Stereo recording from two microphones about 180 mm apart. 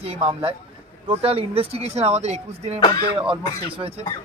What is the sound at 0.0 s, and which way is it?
Speech, 35° right (ahead or behind).